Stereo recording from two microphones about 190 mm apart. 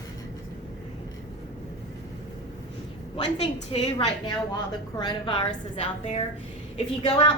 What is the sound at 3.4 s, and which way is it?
A woman's voice, 30° left (ahead or behind).